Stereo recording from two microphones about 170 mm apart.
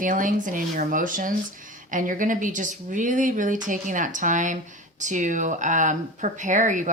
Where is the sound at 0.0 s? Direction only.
50° right (ahead or behind).